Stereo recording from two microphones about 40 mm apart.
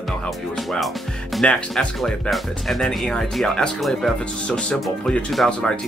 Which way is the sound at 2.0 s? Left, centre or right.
Centre.